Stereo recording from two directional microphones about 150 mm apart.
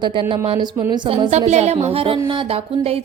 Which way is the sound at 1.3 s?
50° right (ahead or behind).